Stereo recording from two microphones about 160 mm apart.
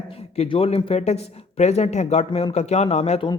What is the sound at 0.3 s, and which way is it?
Speech, 35° left (ahead or behind).